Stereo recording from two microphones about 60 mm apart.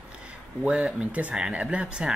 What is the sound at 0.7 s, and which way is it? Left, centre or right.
Speech, centre.